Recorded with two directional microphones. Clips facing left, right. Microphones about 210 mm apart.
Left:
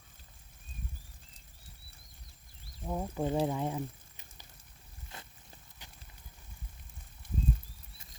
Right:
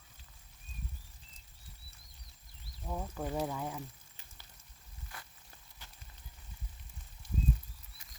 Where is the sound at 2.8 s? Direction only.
20° left (ahead or behind).